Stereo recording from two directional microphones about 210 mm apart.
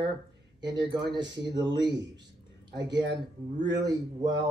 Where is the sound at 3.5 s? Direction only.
20° right (ahead or behind).